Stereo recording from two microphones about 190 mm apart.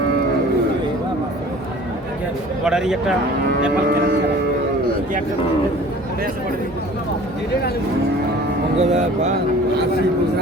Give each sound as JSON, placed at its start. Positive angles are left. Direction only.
{"t": 2.6, "sound": "speech", "side_deg": -5}
{"t": 8.8, "sound": "speech", "side_deg": -40}